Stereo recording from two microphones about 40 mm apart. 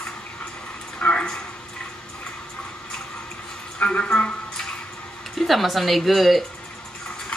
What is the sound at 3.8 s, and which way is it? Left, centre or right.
Speech, left.